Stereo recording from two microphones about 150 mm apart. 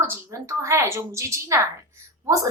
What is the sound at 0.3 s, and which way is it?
A woman's voice, 20° right (ahead or behind).